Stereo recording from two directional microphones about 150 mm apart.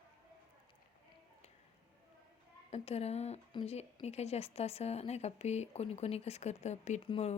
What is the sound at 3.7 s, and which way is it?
Speech, 45° left (ahead or behind).